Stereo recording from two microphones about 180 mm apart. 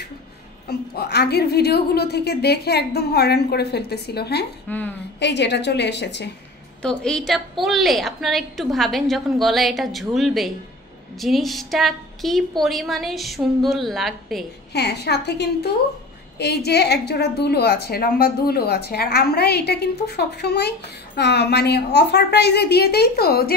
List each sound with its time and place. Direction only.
0.7 s a woman's voice: 65° left (ahead or behind)
4.6 s a woman's voice: 10° left (ahead or behind)
5.2 s a woman's voice: 70° left (ahead or behind)
6.8 s a woman's voice: 5° left (ahead or behind)
14.7 s a woman's voice: 65° left (ahead or behind)